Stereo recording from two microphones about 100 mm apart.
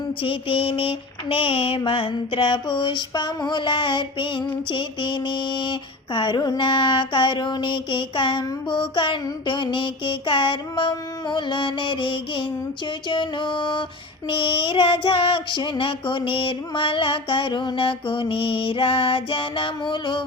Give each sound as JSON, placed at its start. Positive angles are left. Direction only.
{"t": 0.2, "sound": "mantra", "side_deg": 65}
{"t": 13.1, "sound": "music", "side_deg": 55}
{"t": 14.3, "sound": "mantra", "side_deg": 60}